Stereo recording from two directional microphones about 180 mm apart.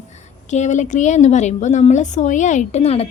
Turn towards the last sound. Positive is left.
turn(degrees=35)  # may be behind; listen again after turning